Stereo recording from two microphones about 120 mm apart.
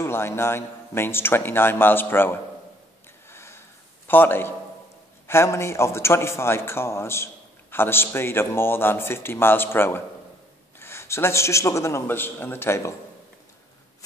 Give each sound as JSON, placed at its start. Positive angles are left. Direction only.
{"t": 0.0, "sound": "a man's voice", "side_deg": 20}
{"t": 3.3, "sound": "a sound", "side_deg": 20}
{"t": 4.1, "sound": "a man's voice", "side_deg": 15}